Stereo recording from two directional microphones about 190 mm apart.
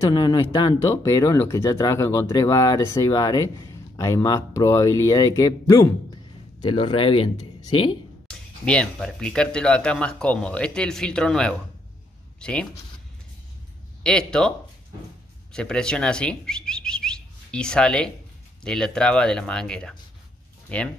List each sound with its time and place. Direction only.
0.1 s speech: 20° left (ahead or behind)
8.3 s speech: 5° left (ahead or behind)
14.0 s speech: 5° left (ahead or behind)
15.5 s speech: 5° left (ahead or behind)